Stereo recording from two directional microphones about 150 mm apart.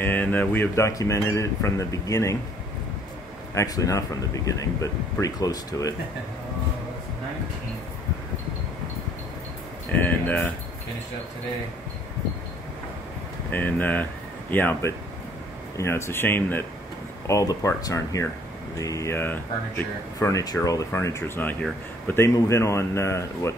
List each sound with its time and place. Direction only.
0.0 s speech: 10° left (ahead or behind)
3.5 s speech: 25° left (ahead or behind)
9.8 s speech: 10° left (ahead or behind)
13.5 s speech: 10° left (ahead or behind)